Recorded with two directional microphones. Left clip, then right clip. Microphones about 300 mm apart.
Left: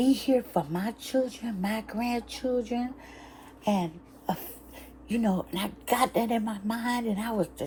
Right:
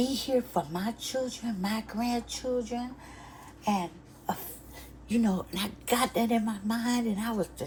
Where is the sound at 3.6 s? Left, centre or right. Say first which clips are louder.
Left 1 dB; left.